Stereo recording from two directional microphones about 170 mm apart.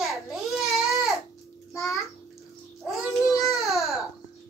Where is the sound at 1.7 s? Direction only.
15° left (ahead or behind).